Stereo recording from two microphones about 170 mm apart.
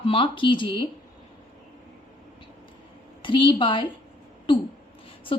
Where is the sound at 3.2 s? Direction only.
30° left (ahead or behind).